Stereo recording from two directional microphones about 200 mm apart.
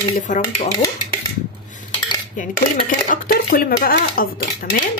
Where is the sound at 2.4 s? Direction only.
40° left (ahead or behind).